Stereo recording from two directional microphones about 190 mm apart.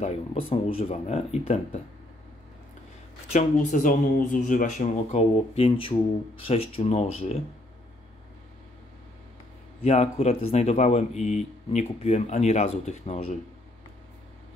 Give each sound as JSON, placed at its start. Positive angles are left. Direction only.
{"t": 0.5, "sound": "speech", "side_deg": 30}
{"t": 3.3, "sound": "speech", "side_deg": 40}
{"t": 9.8, "sound": "speech", "side_deg": 35}